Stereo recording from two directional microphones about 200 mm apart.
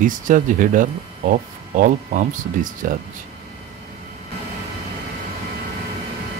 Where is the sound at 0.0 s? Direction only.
40° right (ahead or behind).